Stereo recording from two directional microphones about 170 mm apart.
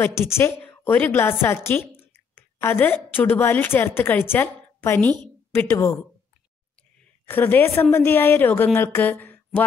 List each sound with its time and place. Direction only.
0.0 s a woman's voice: 15° left (ahead or behind)
7.2 s a woman's voice: 10° left (ahead or behind)